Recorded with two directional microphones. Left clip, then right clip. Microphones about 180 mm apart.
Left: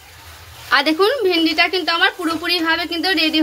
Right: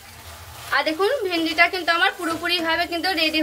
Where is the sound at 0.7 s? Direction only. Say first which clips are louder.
Left 5 dB; 65° left (ahead or behind).